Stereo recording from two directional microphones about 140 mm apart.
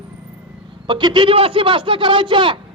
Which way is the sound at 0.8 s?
35° right (ahead or behind).